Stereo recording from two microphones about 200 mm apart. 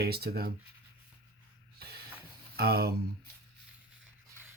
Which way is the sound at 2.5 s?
50° right (ahead or behind).